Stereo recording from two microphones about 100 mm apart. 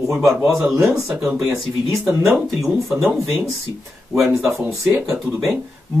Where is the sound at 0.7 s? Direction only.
25° right (ahead or behind).